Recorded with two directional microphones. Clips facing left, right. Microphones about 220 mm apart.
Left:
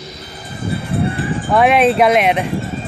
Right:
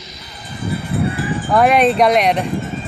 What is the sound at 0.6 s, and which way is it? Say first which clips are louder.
Music: left 1 dB; 30° left (ahead or behind).